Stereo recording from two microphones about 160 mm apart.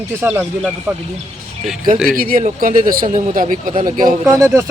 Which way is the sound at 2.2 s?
60° right (ahead or behind).